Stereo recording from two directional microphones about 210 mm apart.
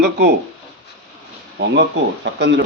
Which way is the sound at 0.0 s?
50° right (ahead or behind).